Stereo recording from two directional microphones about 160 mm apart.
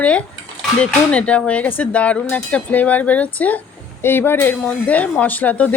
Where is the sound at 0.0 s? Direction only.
5° left (ahead or behind).